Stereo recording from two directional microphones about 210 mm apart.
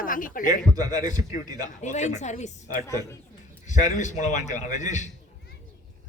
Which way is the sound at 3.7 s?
35° left (ahead or behind).